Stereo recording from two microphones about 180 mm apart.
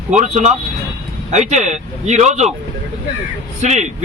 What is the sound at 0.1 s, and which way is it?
A man's voice, 40° right (ahead or behind).